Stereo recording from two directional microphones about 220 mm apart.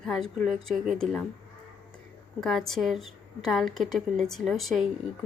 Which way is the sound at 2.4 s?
Centre (ahead or behind).